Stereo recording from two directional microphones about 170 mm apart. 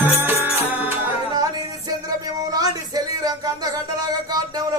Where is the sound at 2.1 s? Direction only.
20° right (ahead or behind).